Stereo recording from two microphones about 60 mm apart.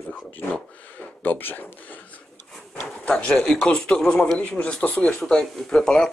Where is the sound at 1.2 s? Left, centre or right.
Left.